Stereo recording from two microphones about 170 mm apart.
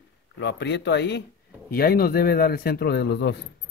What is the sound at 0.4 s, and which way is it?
Speech, 90° left.